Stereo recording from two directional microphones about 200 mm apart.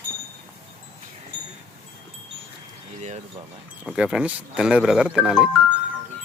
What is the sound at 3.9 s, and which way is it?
Speech, 5° right (ahead or behind).